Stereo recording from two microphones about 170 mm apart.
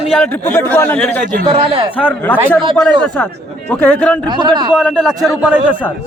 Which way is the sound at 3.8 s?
5° left (ahead or behind).